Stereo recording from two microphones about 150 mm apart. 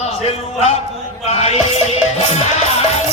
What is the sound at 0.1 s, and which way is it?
A man's voice, 45° left (ahead or behind).